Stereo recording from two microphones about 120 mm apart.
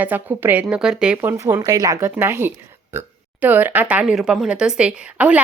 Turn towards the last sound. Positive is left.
turn(degrees=-10)  # may be behind; listen again after turning